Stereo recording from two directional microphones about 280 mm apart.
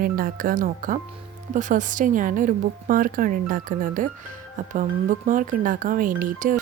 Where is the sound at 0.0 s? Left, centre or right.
Right.